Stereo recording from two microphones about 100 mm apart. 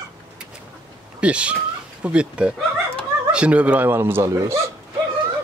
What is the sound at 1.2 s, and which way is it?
A man's voice, 10° right (ahead or behind).